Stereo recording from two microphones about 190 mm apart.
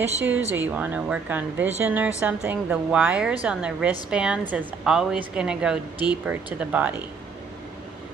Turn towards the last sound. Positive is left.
turn(degrees=-10)  # may be behind; listen again after turning